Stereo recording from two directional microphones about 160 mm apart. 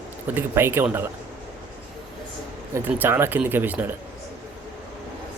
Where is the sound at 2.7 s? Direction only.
15° right (ahead or behind).